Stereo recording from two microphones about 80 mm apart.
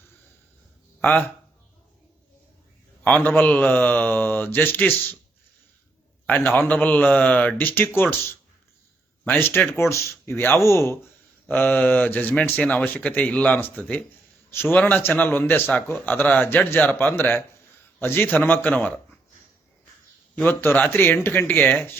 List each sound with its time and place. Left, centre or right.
1.0 s speech: left
3.0 s speech: centre
6.4 s speech: left
9.2 s speech: left
11.4 s speech: left
20.4 s speech: left